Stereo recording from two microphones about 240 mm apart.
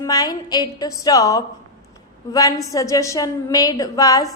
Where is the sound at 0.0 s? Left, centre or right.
Centre.